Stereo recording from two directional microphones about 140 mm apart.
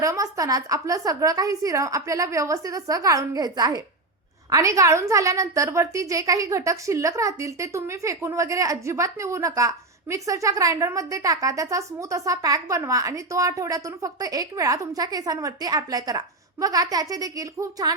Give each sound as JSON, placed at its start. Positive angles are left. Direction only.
{"t": 0.0, "sound": "a woman's voice", "side_deg": -25}